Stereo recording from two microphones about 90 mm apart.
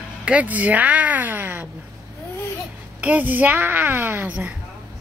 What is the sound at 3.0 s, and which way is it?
A woman's voice, 20° right (ahead or behind).